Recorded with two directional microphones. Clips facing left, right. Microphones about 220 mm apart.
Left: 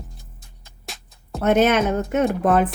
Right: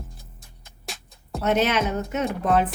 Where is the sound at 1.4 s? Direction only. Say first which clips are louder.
Left 5 dB; 50° left (ahead or behind).